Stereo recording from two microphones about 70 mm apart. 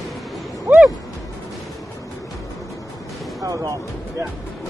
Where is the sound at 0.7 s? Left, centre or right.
Right.